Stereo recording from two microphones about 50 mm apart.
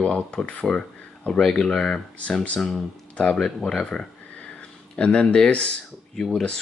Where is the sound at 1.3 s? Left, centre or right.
Centre.